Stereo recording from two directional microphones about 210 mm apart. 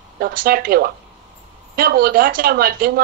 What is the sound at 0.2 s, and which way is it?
Speech, 45° right (ahead or behind).